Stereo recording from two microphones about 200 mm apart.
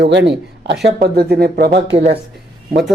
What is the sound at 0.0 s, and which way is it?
A woman's voice, 60° right (ahead or behind).